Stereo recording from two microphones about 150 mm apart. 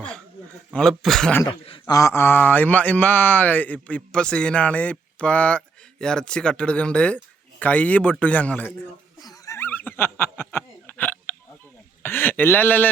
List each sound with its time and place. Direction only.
0.7 s a man's voice: 5° left (ahead or behind)
1.5 s speech: 35° left (ahead or behind)
1.8 s speech: 20° left (ahead or behind)
9.2 s snicker: 25° left (ahead or behind)
10.5 s hiccup: 10° left (ahead or behind)
12.0 s speech: 15° left (ahead or behind)